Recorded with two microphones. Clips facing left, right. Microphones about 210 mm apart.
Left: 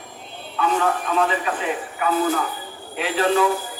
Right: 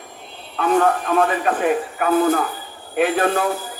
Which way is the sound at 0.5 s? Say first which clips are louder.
Right 4 dB; 50° right (ahead or behind).